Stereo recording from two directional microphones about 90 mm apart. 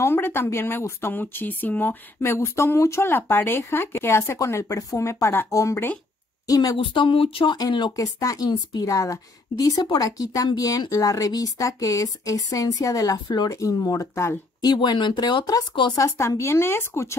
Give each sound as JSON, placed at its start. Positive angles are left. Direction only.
{"t": 0.0, "sound": "speech", "side_deg": 25}
{"t": 6.8, "sound": "speech", "side_deg": 70}
{"t": 7.5, "sound": "speech", "side_deg": 50}
{"t": 7.9, "sound": "speech", "side_deg": 40}
{"t": 14.6, "sound": "speech", "side_deg": 50}
{"t": 15.9, "sound": "speech", "side_deg": 35}